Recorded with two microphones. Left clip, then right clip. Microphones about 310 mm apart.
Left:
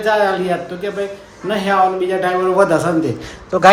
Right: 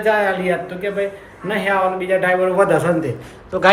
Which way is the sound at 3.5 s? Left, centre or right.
Centre.